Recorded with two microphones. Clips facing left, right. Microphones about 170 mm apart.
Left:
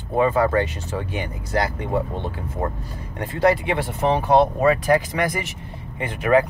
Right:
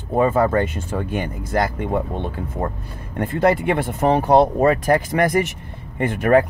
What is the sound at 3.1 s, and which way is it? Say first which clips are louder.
Speech: right 2 dB; 55° right (ahead or behind).